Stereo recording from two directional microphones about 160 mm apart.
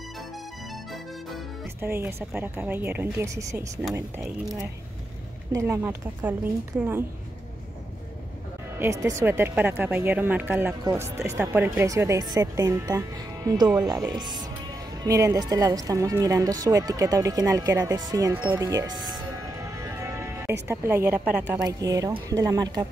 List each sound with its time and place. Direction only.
1.8 s speech: 15° right (ahead or behind)
5.5 s speech: 15° right (ahead or behind)
8.7 s speech: 15° right (ahead or behind)
21.6 s speech: 20° right (ahead or behind)